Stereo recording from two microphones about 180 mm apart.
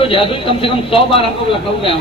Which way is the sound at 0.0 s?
30° left (ahead or behind).